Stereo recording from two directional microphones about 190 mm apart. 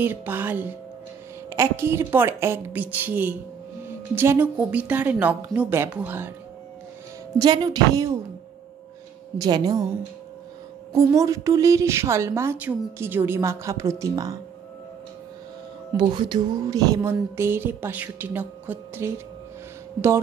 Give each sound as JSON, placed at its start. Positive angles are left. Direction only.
{"t": 0.0, "sound": "a woman's voice", "side_deg": -10}
{"t": 7.3, "sound": "speech", "side_deg": -20}
{"t": 9.4, "sound": "speech", "side_deg": -20}
{"t": 10.9, "sound": "a woman's voice", "side_deg": -15}
{"t": 16.0, "sound": "a woman's voice", "side_deg": -25}